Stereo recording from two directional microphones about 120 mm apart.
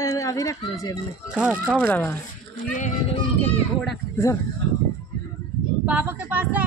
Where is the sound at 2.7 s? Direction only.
90° left.